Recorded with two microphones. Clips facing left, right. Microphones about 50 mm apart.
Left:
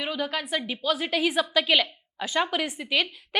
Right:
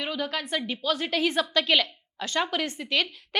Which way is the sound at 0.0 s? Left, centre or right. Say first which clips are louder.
Left 1 dB; centre.